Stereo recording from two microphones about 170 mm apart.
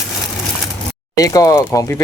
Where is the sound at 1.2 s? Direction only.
20° left (ahead or behind).